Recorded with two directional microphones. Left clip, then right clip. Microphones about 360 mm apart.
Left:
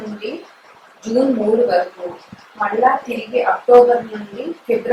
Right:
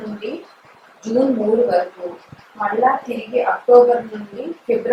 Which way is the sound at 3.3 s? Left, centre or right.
Centre.